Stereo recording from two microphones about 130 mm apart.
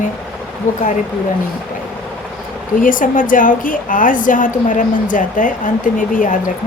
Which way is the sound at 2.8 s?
90° left.